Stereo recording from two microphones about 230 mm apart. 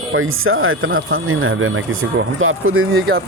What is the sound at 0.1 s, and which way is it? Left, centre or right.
Speech, right.